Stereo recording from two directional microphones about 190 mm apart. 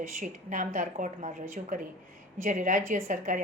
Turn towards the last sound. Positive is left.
turn(degrees=-45)  # may be behind; listen again after turning